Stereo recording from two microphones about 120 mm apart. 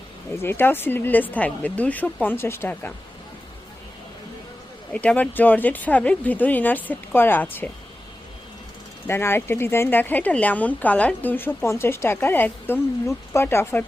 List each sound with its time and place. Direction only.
0.4 s speech: 20° left (ahead or behind)
4.9 s speech: 10° left (ahead or behind)
9.0 s speech: 20° left (ahead or behind)